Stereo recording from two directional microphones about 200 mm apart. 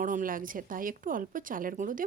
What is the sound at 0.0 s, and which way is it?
Speech, 45° right (ahead or behind).